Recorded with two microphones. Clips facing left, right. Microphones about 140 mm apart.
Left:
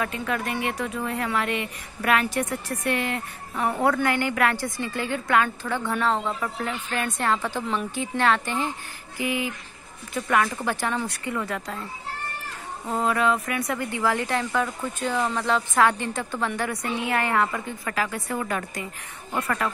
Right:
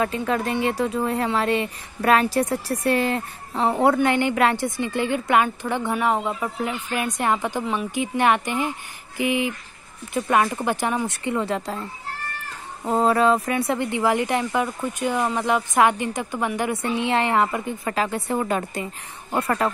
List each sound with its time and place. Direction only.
0.0 s speech: 30° right (ahead or behind)
12.8 s speech: 35° right (ahead or behind)